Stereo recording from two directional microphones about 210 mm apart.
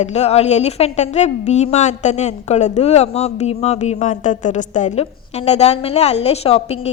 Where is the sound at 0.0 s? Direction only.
30° left (ahead or behind).